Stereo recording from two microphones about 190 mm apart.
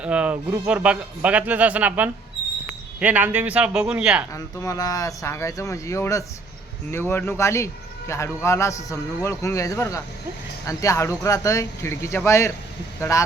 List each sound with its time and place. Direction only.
0.0 s speech: 5° right (ahead or behind)
4.3 s a man's voice: 15° left (ahead or behind)